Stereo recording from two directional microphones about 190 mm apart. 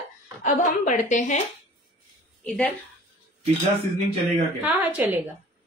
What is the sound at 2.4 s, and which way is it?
Speech, centre (ahead or behind).